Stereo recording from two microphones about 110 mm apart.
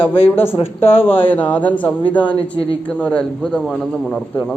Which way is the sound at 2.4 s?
55° left (ahead or behind).